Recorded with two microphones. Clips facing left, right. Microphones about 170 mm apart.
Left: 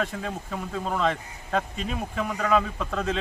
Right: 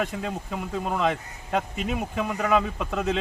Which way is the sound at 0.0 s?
15° right (ahead or behind).